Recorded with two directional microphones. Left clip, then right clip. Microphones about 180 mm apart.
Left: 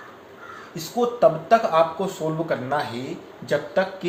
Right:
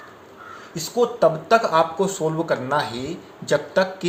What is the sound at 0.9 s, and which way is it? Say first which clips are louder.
Speech: even; 45° right (ahead or behind).